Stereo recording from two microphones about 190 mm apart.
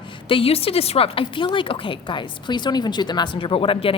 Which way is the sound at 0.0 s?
25° left (ahead or behind).